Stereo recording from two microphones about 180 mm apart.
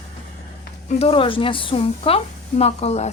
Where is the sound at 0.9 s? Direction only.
30° left (ahead or behind).